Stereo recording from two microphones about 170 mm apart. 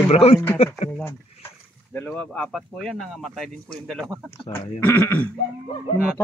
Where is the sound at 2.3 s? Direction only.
Centre (ahead or behind).